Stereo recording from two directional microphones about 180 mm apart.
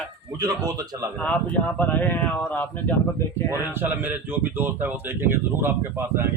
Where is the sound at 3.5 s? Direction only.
10° right (ahead or behind).